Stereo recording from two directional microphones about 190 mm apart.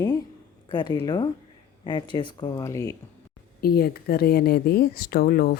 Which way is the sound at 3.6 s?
55° left (ahead or behind).